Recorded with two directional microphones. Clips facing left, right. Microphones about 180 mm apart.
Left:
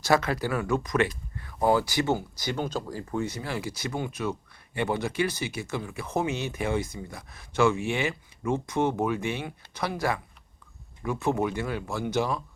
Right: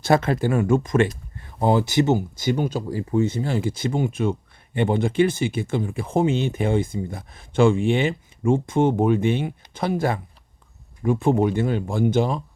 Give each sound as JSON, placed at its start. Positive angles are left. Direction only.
{"t": 0.1, "sound": "speech", "side_deg": -25}
{"t": 3.2, "sound": "speech", "side_deg": -25}